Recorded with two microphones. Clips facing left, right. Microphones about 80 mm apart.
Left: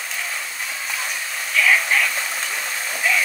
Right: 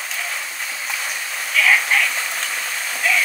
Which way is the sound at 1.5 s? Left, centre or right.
Centre.